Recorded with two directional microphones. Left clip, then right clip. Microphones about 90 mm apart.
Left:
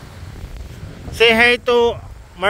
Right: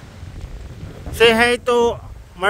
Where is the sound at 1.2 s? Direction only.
25° right (ahead or behind).